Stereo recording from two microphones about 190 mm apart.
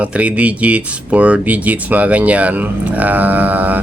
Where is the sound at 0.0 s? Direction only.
5° right (ahead or behind).